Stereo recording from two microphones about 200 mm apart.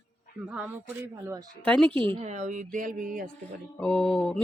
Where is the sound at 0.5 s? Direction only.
5° right (ahead or behind).